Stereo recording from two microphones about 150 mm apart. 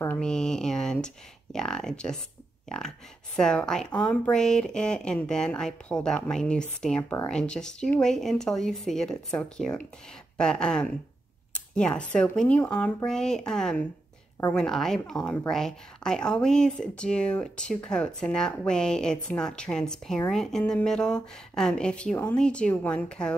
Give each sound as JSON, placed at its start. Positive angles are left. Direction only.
{"t": 0.2, "sound": "speech", "side_deg": 5}
{"t": 3.3, "sound": "a woman's voice", "side_deg": 5}